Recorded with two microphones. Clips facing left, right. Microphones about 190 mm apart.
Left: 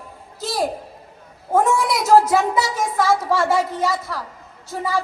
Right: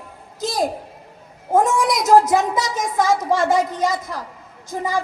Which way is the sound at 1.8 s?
20° right (ahead or behind).